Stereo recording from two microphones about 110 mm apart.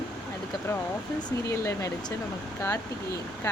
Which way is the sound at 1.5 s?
25° left (ahead or behind).